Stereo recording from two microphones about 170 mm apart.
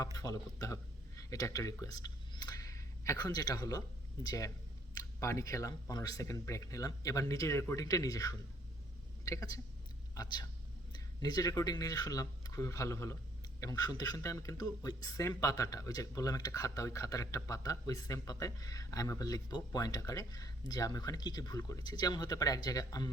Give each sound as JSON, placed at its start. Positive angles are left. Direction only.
{"t": 0.0, "sound": "a man's voice", "side_deg": 20}